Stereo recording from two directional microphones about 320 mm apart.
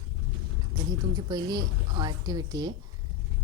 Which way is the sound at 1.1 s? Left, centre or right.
Centre.